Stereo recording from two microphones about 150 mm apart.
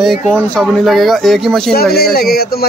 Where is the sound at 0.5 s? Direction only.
Centre (ahead or behind).